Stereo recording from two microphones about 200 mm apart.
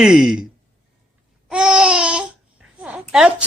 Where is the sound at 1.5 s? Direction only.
5° right (ahead or behind).